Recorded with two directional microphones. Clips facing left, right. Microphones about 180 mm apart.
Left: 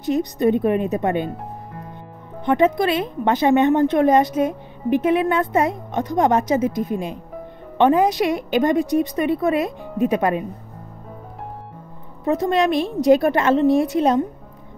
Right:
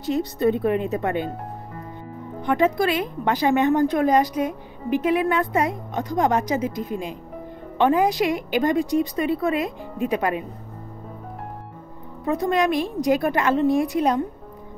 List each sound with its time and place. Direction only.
0.0 s a woman's voice: 20° left (ahead or behind)
2.4 s a woman's voice: 20° left (ahead or behind)
7.7 s a woman's voice: 20° left (ahead or behind)
12.3 s a woman's voice: 25° left (ahead or behind)